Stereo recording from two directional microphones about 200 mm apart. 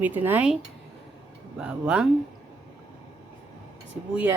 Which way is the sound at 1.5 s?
5° right (ahead or behind).